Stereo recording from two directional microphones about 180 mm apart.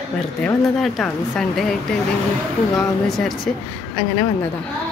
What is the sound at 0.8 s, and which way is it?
Speech, centre (ahead or behind).